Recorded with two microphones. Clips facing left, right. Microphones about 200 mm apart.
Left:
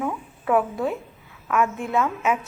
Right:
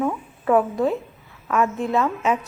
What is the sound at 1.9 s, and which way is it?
Speech, centre (ahead or behind).